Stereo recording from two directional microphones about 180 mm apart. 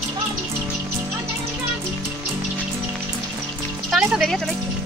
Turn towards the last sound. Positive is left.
turn(degrees=0)  # may be behind; listen again after turning